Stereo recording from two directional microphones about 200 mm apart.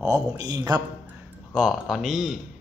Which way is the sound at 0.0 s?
15° right (ahead or behind).